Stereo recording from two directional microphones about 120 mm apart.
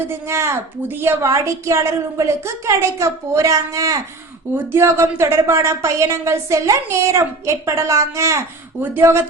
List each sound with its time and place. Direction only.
0.0 s a woman's voice: 20° right (ahead or behind)